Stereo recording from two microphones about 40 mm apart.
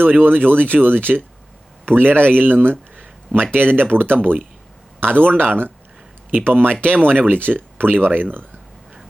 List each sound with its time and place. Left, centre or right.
0.0 s speech: right